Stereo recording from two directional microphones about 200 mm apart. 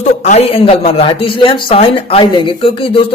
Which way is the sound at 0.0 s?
35° left (ahead or behind).